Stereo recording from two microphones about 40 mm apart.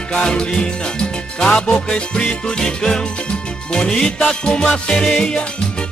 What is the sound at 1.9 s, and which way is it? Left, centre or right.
Music, left.